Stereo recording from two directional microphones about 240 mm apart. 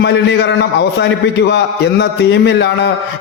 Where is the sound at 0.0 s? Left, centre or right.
Left.